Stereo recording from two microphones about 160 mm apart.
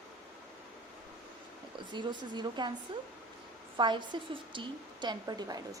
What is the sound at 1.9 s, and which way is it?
A woman's voice, 30° right (ahead or behind).